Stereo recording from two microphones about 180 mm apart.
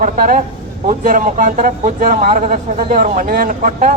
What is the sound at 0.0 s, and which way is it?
A man's voice, 50° right (ahead or behind).